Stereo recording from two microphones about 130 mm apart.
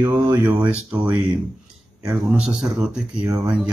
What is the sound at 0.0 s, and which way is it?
Speech, 20° right (ahead or behind).